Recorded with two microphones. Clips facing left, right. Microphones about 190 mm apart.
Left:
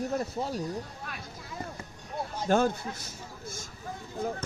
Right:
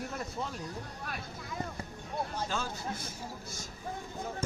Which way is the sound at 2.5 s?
55° left (ahead or behind).